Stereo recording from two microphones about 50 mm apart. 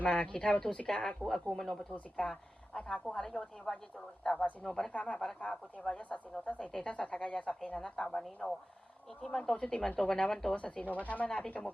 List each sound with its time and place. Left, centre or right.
0.0 s a woman's voice: left
4.9 s a woman's voice: left
10.5 s a woman's voice: left
11.3 s a woman's voice: centre